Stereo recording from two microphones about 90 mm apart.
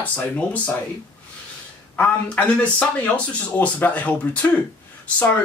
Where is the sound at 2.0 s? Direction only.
15° left (ahead or behind).